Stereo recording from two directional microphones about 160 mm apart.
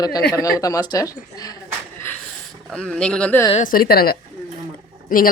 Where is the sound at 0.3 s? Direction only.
20° left (ahead or behind).